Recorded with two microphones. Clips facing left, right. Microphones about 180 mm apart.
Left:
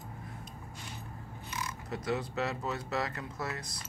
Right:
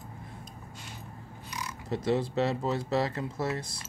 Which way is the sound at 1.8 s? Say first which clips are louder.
Right 7 dB; 30° right (ahead or behind).